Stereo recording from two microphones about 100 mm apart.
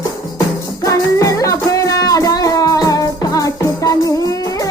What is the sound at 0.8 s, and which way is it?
Music, 35° left (ahead or behind).